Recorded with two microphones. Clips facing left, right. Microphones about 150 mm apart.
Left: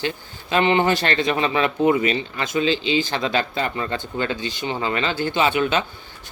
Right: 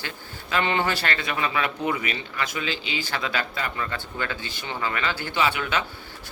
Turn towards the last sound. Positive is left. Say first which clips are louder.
# left 5 dB
turn(degrees=25)  # may be behind; listen again after turning